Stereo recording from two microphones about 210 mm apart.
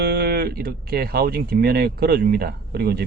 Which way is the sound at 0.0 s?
50° right (ahead or behind).